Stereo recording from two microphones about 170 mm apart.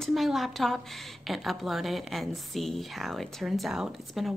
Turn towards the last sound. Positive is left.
turn(degrees=0)  # may be behind; listen again after turning